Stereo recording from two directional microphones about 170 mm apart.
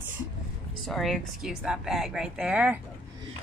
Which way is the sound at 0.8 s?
Centre (ahead or behind).